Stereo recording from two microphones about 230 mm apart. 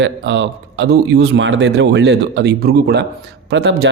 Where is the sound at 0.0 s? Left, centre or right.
Right.